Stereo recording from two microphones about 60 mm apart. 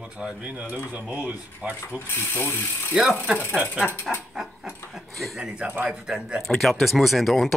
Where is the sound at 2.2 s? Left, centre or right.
Left.